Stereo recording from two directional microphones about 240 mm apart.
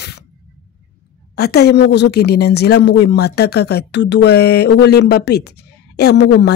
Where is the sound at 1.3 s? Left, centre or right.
Left.